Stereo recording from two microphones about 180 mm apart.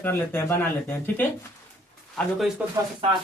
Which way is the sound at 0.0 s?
10° left (ahead or behind).